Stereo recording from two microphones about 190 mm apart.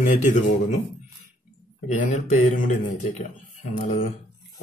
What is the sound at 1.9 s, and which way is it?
A man's voice, 40° left (ahead or behind).